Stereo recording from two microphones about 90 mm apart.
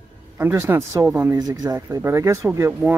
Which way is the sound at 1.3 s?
45° right (ahead or behind).